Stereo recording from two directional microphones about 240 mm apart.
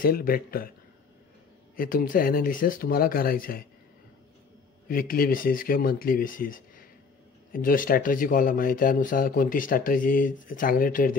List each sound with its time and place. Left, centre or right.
0.0 s speech: left
1.8 s speech: left
4.8 s speech: left